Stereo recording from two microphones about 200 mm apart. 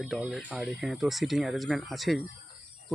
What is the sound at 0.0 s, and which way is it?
Speech, centre (ahead or behind).